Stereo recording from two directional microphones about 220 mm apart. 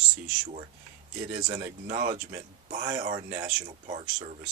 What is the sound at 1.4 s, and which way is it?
Speech, 30° right (ahead or behind).